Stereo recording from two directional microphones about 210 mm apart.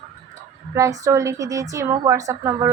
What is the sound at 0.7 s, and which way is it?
A woman's voice, 15° right (ahead or behind).